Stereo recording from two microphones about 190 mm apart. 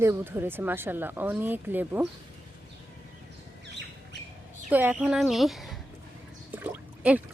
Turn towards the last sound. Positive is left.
turn(degrees=-10)  # may be behind; listen again after turning